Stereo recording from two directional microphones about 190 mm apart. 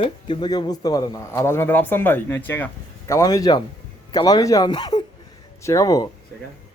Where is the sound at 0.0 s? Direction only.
25° left (ahead or behind).